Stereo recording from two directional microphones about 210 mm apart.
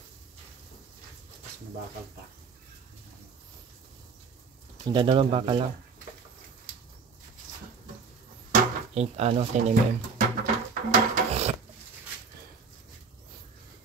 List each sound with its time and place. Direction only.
4.8 s speech: 20° right (ahead or behind)
8.5 s music: 30° right (ahead or behind)